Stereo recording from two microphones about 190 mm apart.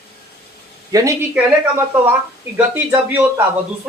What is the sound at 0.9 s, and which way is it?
Speech, 15° right (ahead or behind).